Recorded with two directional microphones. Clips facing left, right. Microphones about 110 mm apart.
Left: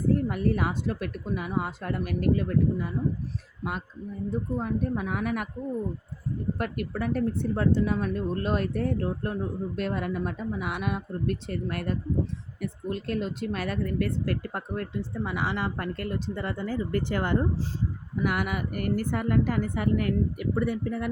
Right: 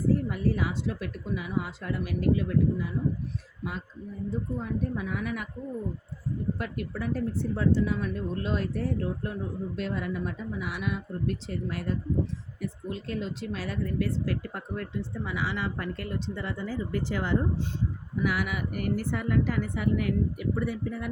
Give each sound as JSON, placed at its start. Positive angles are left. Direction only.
{"t": 0.1, "sound": "speech", "side_deg": 55}
{"t": 4.3, "sound": "speech", "side_deg": 55}
{"t": 6.6, "sound": "speech", "side_deg": 55}